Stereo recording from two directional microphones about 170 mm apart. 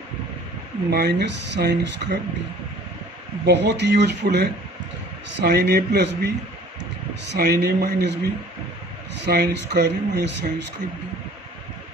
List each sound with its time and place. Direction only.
0.8 s speech: 75° right (ahead or behind)
3.4 s speech: 90° right
5.4 s speech: 70° right (ahead or behind)
7.3 s speech: 75° right (ahead or behind)
8.0 s speech: 90° right